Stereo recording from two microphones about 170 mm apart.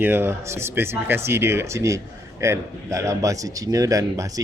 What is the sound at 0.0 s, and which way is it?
Speech, 10° right (ahead or behind).